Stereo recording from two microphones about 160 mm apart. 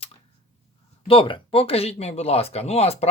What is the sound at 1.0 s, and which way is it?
Speech, 35° left (ahead or behind).